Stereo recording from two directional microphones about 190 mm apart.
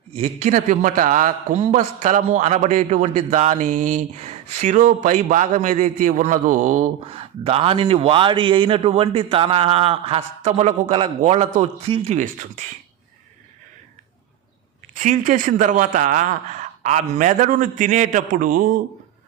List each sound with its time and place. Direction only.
0.1 s a man's voice: 35° right (ahead or behind)
14.9 s speech: 45° right (ahead or behind)